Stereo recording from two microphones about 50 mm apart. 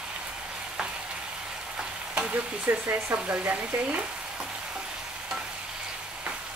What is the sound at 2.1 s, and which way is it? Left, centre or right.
Stir, right.